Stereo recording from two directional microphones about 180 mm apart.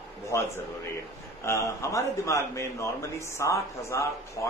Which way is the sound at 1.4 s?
15° left (ahead or behind).